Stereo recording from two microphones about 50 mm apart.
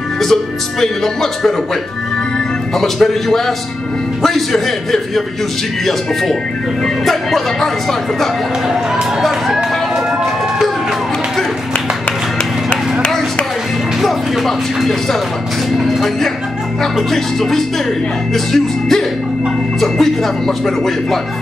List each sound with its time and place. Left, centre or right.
0.2 s speech: centre
2.7 s a man's voice: centre
7.1 s speech: centre
9.2 s a sound: centre
14.0 s speech: centre
15.7 s music: centre
16.8 s speech: centre